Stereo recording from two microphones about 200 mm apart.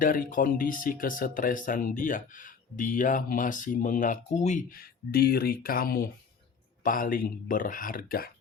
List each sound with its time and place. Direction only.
0.0 s speech: 45° left (ahead or behind)